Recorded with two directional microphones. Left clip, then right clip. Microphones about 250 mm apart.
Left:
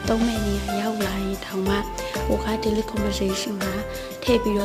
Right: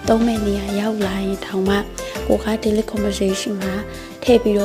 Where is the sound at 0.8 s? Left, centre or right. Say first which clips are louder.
Right 4 dB; centre.